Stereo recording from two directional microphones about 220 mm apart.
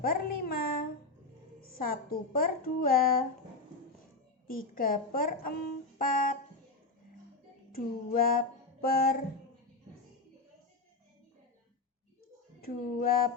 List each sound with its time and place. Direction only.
0.0 s a child's voice: 40° left (ahead or behind)
4.4 s a woman's voice: 40° left (ahead or behind)
7.7 s a sound: 40° left (ahead or behind)
12.6 s speech: 45° left (ahead or behind)